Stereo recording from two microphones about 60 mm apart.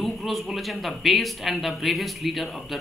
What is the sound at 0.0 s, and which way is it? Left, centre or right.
A man's voice, centre.